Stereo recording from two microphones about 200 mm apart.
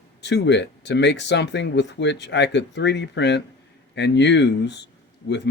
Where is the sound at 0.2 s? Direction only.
60° left (ahead or behind).